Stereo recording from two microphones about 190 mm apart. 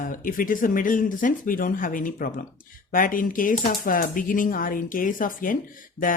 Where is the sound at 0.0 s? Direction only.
45° left (ahead or behind).